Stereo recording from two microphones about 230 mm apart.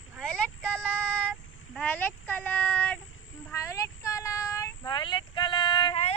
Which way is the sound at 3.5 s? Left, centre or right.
Centre.